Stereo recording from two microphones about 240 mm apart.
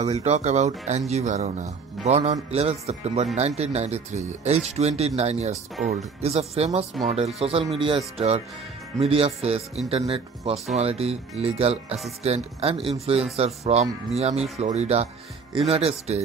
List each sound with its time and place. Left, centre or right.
0.0 s speech: right
9.0 s speech: right